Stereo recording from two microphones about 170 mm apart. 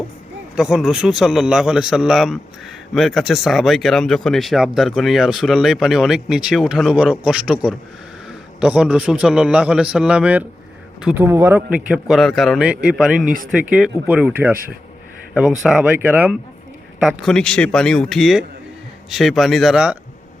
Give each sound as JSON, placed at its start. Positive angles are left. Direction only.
{"t": 0.5, "sound": "speech", "side_deg": -5}
{"t": 13.2, "sound": "speech", "side_deg": -55}
{"t": 13.5, "sound": "speech", "side_deg": -5}